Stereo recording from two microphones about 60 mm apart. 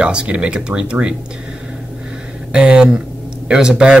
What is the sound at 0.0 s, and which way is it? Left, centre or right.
Speech, centre.